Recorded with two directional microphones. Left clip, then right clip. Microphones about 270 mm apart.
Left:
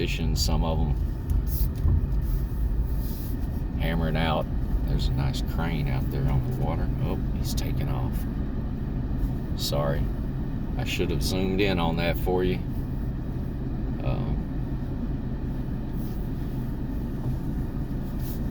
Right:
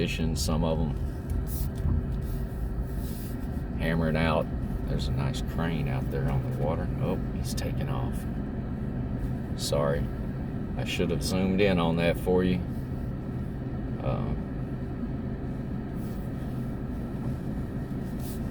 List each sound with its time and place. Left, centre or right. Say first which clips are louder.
0.0 s speech: left 1 dB; centre
3.8 s speech: even; centre
9.6 s speech: right 1 dB; centre